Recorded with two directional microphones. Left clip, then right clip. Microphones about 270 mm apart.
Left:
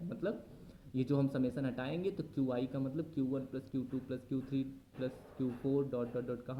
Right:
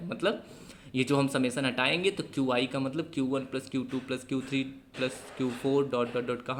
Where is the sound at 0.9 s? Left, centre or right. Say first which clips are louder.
Right 8 dB; centre.